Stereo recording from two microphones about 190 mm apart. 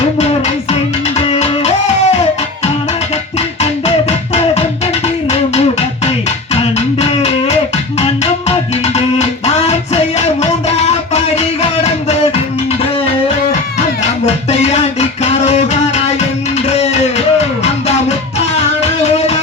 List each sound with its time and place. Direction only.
0.0 s music: 35° left (ahead or behind)
5.0 s music: 30° left (ahead or behind)
14.0 s music: 35° left (ahead or behind)
16.6 s music: 35° left (ahead or behind)